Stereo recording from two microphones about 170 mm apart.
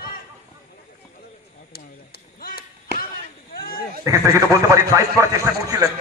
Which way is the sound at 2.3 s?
60° left (ahead or behind).